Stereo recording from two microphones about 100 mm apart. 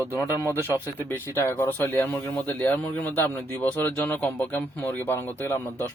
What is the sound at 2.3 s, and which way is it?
Speech, 15° left (ahead or behind).